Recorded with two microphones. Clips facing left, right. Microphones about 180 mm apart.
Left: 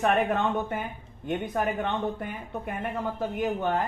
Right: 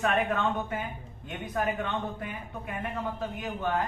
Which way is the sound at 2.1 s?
50° left (ahead or behind).